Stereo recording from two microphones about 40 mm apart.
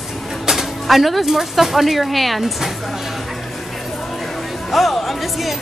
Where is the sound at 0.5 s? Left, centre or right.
Centre.